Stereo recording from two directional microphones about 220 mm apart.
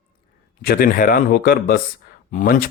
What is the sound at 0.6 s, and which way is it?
Speech, 45° left (ahead or behind).